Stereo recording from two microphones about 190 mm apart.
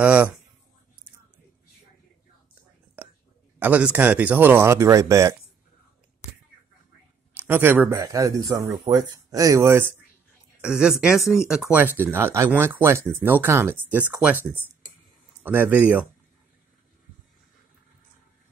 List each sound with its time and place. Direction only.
0.0 s speech: 5° right (ahead or behind)
3.5 s speech: 10° right (ahead or behind)
7.3 s a woman's voice: 10° right (ahead or behind)
15.4 s speech: 10° right (ahead or behind)